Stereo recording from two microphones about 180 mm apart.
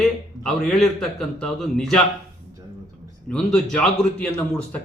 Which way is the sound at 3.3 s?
5° left (ahead or behind).